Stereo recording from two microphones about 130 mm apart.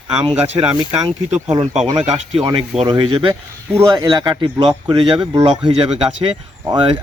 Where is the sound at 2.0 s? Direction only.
50° right (ahead or behind).